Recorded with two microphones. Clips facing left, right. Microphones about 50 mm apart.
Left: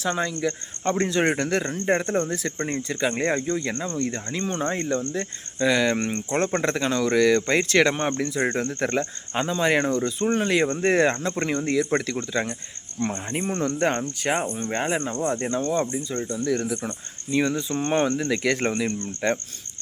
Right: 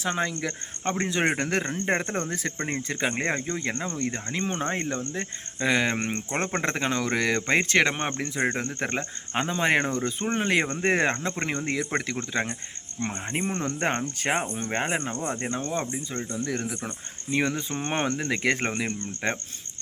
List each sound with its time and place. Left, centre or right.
0.0 s speech: right
0.3 s speech: right
0.9 s speech: centre
1.5 s speech: right
3.1 s speech: right
17.3 s speech: right